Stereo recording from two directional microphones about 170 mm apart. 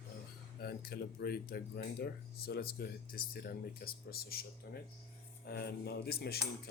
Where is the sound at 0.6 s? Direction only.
65° left (ahead or behind).